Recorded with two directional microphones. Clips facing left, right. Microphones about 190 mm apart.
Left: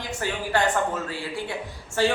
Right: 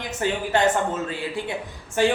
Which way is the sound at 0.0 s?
20° right (ahead or behind).